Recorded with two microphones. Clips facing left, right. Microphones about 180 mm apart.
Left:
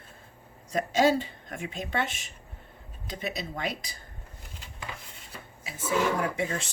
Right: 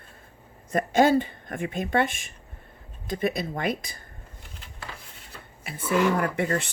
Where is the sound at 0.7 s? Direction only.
50° right (ahead or behind).